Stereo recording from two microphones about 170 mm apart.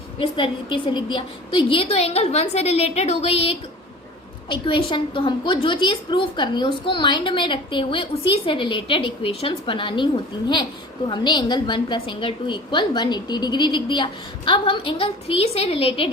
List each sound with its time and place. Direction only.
0.2 s a woman's voice: 30° left (ahead or behind)
11.1 s a woman's voice: 25° left (ahead or behind)